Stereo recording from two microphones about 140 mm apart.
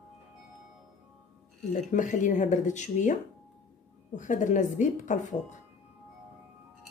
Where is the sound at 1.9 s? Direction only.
65° left (ahead or behind).